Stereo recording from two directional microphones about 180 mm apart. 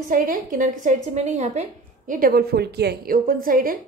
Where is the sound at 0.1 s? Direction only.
50° right (ahead or behind).